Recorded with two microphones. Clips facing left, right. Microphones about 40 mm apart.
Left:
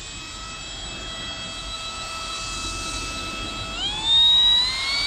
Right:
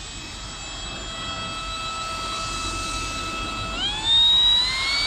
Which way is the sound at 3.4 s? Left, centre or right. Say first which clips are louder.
Right 2 dB; centre.